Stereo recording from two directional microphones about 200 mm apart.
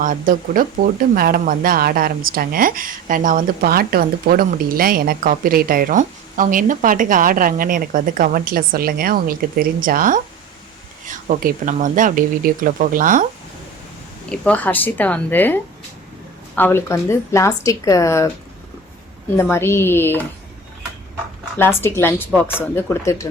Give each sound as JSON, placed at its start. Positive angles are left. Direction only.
{"t": 0.0, "sound": "speech", "side_deg": -45}
{"t": 14.3, "sound": "a woman's voice", "side_deg": 5}
{"t": 16.6, "sound": "a woman's voice", "side_deg": 10}
{"t": 19.4, "sound": "a woman's voice", "side_deg": 10}
{"t": 21.8, "sound": "a woman's voice", "side_deg": 10}